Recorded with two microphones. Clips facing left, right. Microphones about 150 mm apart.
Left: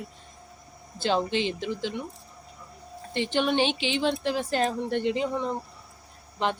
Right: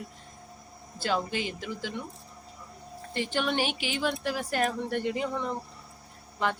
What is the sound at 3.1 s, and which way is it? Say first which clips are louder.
Speech: left 4 dB; 20° left (ahead or behind).